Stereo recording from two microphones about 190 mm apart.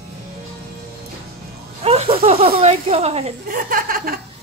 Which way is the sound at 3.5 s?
50° right (ahead or behind).